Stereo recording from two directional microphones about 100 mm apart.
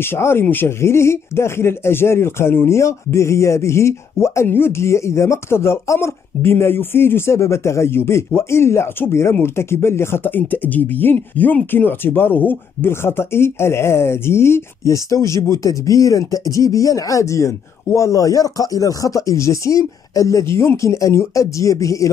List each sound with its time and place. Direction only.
0.2 s speech: 25° left (ahead or behind)